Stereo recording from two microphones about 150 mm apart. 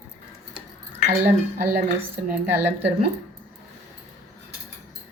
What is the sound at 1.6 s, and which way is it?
A woman's voice, 10° right (ahead or behind).